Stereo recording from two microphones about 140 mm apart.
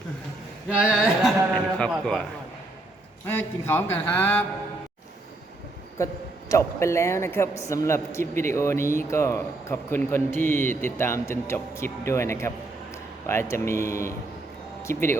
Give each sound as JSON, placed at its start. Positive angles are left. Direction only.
{"t": 0.7, "sound": "a sound", "side_deg": -10}
{"t": 1.9, "sound": "a man's voice", "side_deg": 5}
{"t": 3.2, "sound": "speech", "side_deg": 15}
{"t": 6.0, "sound": "a man's voice", "side_deg": 20}